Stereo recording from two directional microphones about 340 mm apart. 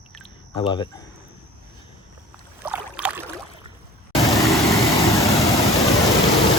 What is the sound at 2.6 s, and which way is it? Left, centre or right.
Boat, centre.